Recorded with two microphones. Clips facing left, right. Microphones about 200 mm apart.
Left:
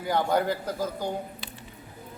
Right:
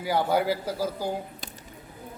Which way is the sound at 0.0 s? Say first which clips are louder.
Right 1 dB; 5° right (ahead or behind).